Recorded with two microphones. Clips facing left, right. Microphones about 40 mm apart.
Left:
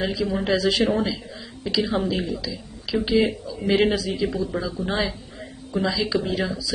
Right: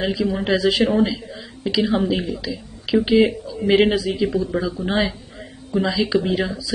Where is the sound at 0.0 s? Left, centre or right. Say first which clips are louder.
Right 3 dB; centre.